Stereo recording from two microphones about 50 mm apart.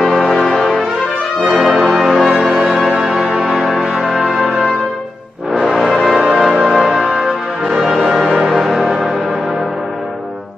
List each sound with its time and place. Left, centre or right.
0.5 s brass instrument: centre
2.4 s music: centre
4.3 s brass instrument: centre
5.6 s music: centre